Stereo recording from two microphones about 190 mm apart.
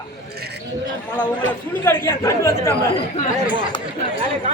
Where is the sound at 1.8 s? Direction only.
10° left (ahead or behind).